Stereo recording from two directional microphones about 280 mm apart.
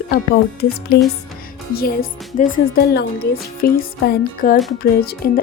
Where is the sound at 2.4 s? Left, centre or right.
Left.